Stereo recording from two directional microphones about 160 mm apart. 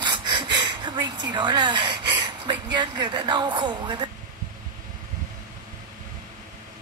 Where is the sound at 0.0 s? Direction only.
30° right (ahead or behind).